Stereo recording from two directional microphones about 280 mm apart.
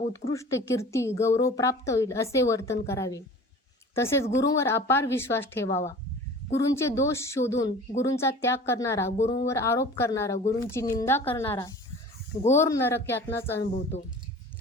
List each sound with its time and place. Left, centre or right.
0.1 s a woman's voice: centre
9.1 s speech: left
9.5 s a woman's voice: centre
13.6 s speech: left